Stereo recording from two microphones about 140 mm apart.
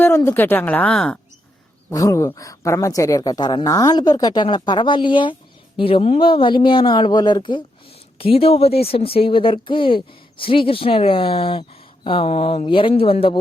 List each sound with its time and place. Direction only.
0.3 s speech: 15° left (ahead or behind)
1.9 s speech: 25° left (ahead or behind); by 13.3 s 40° left (ahead or behind)